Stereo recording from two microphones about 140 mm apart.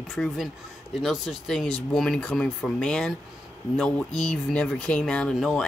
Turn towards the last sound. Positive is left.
turn(degrees=5)  # may be behind; listen again after turning